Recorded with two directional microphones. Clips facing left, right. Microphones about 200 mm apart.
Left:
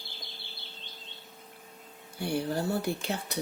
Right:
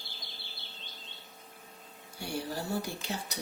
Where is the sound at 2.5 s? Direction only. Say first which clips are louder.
Left 5 dB; 55° left (ahead or behind).